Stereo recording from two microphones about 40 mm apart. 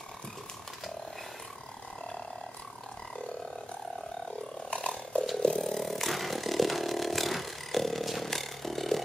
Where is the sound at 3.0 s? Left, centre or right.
Left.